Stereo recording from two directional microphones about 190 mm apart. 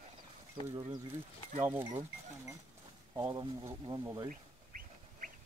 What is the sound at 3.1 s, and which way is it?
Speech, 20° right (ahead or behind).